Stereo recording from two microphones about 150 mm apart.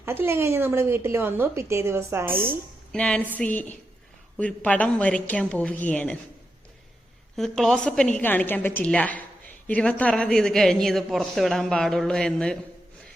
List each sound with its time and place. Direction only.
0.0 s a woman's voice: 15° right (ahead or behind)
2.9 s a woman's voice: 5° left (ahead or behind)
7.3 s a woman's voice: centre (ahead or behind)